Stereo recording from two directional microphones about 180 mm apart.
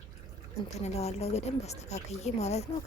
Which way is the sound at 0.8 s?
35° left (ahead or behind).